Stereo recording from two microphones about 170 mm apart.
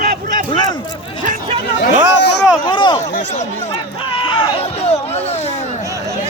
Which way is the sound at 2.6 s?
25° left (ahead or behind).